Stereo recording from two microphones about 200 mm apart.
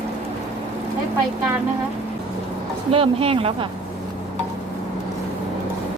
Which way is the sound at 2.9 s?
30° right (ahead or behind).